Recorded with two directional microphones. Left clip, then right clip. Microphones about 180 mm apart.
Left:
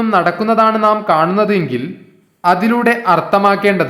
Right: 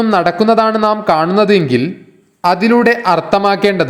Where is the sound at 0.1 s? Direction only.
25° right (ahead or behind).